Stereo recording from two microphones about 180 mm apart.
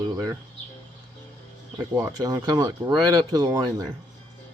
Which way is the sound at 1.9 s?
20° right (ahead or behind).